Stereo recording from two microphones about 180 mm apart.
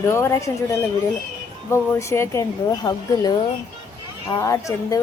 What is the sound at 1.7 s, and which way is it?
Speech, 15° left (ahead or behind).